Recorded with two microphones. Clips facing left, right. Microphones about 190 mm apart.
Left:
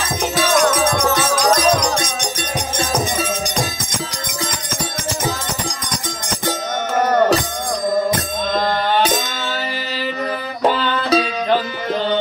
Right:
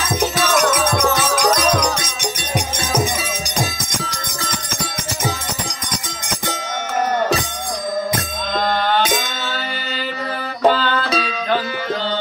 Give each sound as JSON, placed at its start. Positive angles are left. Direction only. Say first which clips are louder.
{"t": 0.9, "sound": "music", "louder": "even", "side_deg": -10}
{"t": 10.7, "sound": "music", "louder": "left 4 dB", "side_deg": 20}